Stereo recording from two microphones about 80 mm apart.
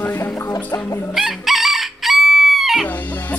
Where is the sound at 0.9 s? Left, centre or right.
Left.